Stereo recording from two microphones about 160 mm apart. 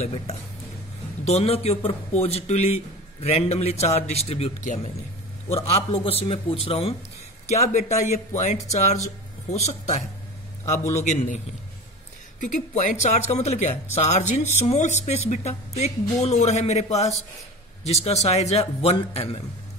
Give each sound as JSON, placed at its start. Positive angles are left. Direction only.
{"t": 0.0, "sound": "a man's voice", "side_deg": 40}
{"t": 7.7, "sound": "a man's voice", "side_deg": 50}